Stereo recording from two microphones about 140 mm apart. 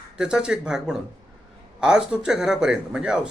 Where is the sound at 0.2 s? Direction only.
5° right (ahead or behind).